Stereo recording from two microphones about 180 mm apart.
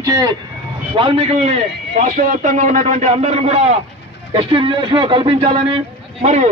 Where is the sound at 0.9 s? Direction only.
30° right (ahead or behind).